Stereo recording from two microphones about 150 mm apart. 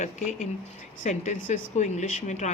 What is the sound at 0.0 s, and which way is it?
Speech, 55° left (ahead or behind).